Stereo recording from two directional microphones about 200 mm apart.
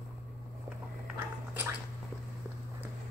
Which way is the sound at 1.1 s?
10° right (ahead or behind).